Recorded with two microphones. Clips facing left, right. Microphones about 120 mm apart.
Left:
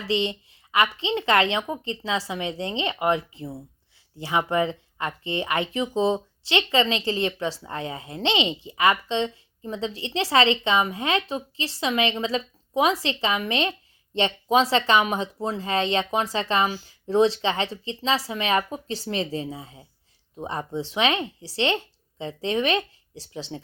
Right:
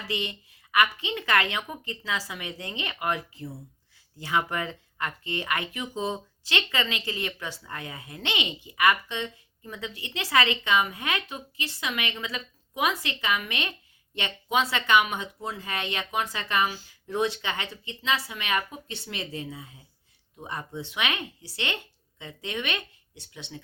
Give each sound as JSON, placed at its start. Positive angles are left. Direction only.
{"t": 0.1, "sound": "speech", "side_deg": 25}